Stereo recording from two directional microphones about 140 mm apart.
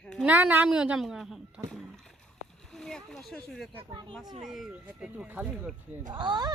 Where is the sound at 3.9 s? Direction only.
35° right (ahead or behind).